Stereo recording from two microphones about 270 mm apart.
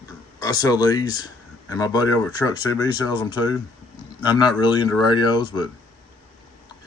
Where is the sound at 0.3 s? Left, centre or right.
Centre.